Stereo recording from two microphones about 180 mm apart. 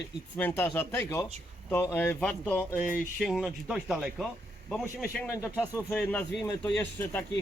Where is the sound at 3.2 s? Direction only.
Centre (ahead or behind).